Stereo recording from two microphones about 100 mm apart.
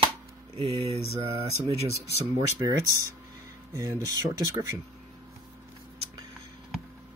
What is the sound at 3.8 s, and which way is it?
Speech, 35° right (ahead or behind).